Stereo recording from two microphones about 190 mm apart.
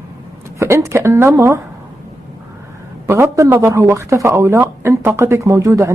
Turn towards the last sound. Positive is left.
turn(degrees=-15)  # may be behind; listen again after turning